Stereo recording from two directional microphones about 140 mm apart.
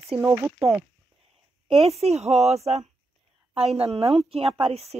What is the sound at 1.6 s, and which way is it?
A woman's voice, 45° right (ahead or behind).